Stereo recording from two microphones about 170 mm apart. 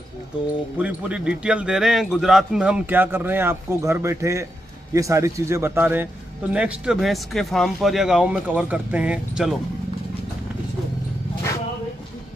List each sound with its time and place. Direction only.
0.7 s a man's voice: 5° right (ahead or behind)